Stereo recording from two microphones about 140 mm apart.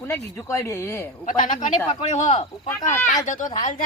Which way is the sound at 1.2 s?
65° left (ahead or behind).